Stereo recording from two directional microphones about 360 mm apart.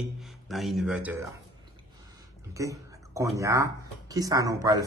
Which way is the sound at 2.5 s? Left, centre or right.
Centre.